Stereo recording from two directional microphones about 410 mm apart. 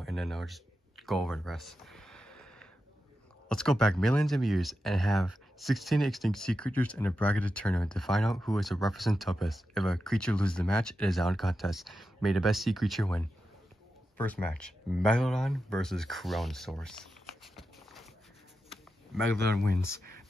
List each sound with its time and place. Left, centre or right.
0.0 s a sound: centre
3.4 s speech: centre
19.5 s speech: right